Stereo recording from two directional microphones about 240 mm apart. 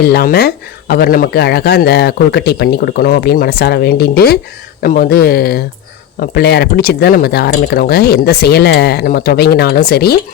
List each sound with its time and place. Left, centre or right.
0.0 s speech: left